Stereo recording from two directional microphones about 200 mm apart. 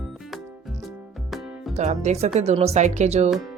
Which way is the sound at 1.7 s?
35° right (ahead or behind).